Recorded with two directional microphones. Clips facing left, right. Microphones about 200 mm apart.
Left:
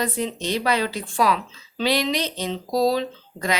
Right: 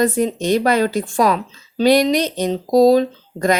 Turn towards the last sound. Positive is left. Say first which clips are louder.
# right 9 dB
turn(degrees=-45)  # may be behind; listen again after turning